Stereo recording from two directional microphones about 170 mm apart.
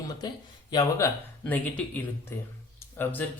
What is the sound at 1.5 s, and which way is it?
Speech, 10° left (ahead or behind).